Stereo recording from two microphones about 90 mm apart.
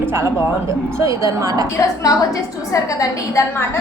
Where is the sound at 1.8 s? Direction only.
40° left (ahead or behind).